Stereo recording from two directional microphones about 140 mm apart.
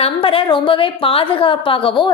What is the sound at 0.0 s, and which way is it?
A woman's voice, 40° left (ahead or behind).